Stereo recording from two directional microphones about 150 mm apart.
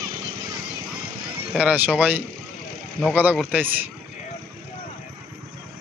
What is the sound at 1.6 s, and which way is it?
Speech, 10° right (ahead or behind).